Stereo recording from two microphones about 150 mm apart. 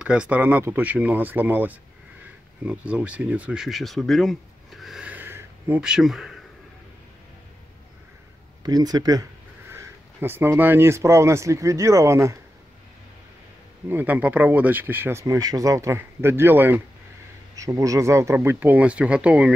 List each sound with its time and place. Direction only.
0.0 s speech: 5° right (ahead or behind)
8.6 s speech: 25° right (ahead or behind)
13.8 s speech: 10° right (ahead or behind)